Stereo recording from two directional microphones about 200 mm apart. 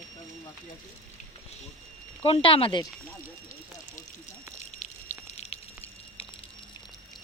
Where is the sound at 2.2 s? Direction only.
25° left (ahead or behind).